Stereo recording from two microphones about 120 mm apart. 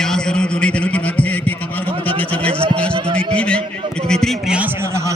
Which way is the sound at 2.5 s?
50° right (ahead or behind).